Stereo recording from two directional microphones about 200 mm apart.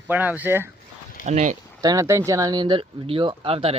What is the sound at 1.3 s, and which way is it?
Speech, 35° right (ahead or behind).